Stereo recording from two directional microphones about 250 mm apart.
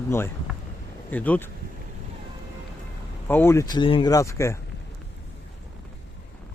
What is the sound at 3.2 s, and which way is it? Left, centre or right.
Speech, centre.